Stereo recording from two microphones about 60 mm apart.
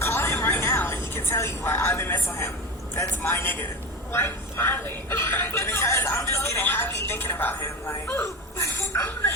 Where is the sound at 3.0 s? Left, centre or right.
Left.